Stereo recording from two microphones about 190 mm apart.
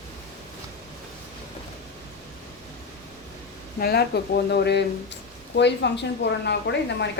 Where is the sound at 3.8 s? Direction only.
55° left (ahead or behind).